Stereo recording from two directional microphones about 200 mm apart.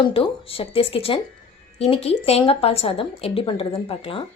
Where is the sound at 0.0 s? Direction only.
25° left (ahead or behind).